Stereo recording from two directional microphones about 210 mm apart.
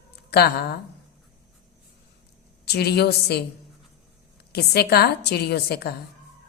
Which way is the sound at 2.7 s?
50° left (ahead or behind).